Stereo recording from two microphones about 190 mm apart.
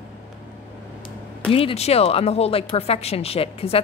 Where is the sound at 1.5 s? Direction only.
30° left (ahead or behind).